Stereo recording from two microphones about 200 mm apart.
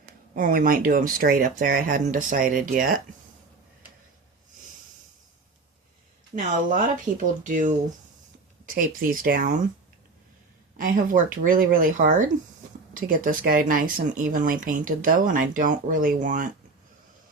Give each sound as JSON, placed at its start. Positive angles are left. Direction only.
{"t": 0.0, "sound": "speech", "side_deg": -45}
{"t": 6.3, "sound": "speech", "side_deg": -40}
{"t": 10.8, "sound": "speech", "side_deg": -40}